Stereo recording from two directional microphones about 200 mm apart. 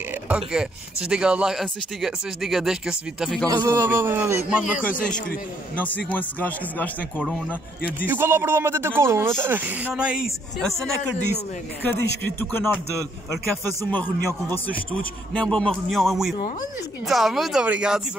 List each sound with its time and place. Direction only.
0.3 s speech: 5° right (ahead or behind)
3.4 s a man's voice: 15° right (ahead or behind)
4.9 s speech: 40° left (ahead or behind)
5.8 s a man's voice: 10° left (ahead or behind)
8.1 s a man's voice: 10° right (ahead or behind)
12.4 s a man's voice: 10° left (ahead or behind)
13.8 s speech: 10° left (ahead or behind)